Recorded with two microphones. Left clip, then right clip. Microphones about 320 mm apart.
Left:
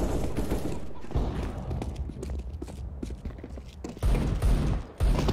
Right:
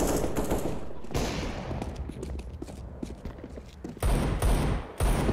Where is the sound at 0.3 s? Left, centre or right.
Centre.